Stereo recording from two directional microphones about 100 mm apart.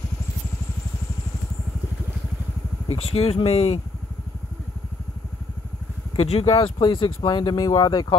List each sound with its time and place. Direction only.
2.9 s speech: 85° left
6.1 s speech: 90° left; by 7.5 s 50° left (ahead or behind)
7.5 s speech: 40° left (ahead or behind)